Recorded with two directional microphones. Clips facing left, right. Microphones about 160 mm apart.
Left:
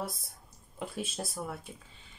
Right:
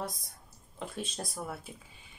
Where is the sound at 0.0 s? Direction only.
5° left (ahead or behind).